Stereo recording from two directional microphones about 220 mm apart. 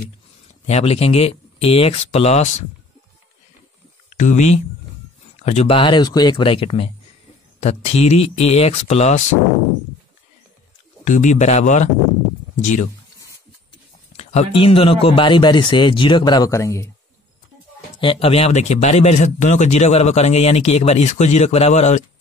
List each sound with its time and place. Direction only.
0.7 s a man's voice: 30° left (ahead or behind)
4.2 s a man's voice: 35° left (ahead or behind)
11.1 s speech: 35° left (ahead or behind)
14.1 s a man's voice: 25° left (ahead or behind)
18.0 s a man's voice: 25° left (ahead or behind)